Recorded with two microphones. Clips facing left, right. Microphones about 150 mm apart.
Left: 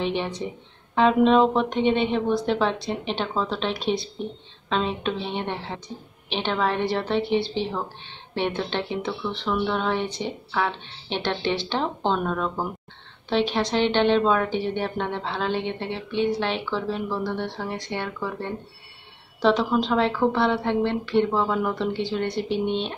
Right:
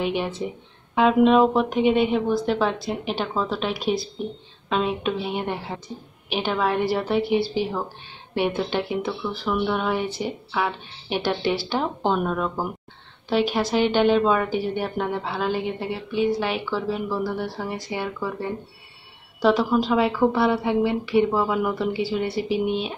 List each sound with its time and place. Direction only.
0.0 s a woman's voice: 5° right (ahead or behind)